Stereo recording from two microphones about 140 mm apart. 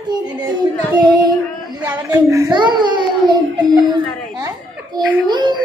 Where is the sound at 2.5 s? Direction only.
35° right (ahead or behind).